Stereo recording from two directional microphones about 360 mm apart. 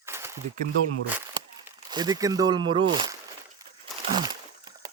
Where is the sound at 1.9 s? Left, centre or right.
Centre.